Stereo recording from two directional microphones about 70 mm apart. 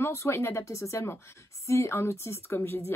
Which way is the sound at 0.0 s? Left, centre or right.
Left.